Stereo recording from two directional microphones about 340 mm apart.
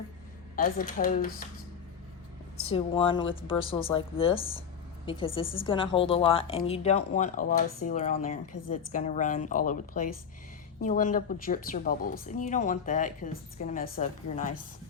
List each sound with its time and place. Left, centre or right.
0.5 s speech: left
2.6 s speech: centre